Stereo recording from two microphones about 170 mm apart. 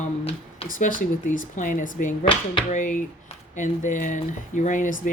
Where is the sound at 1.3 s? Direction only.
50° left (ahead or behind).